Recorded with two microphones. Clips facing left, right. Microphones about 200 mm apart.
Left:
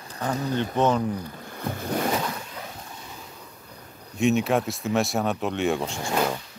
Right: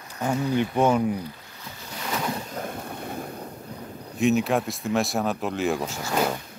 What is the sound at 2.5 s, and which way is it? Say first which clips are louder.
Waves: right 6 dB; 55° right (ahead or behind).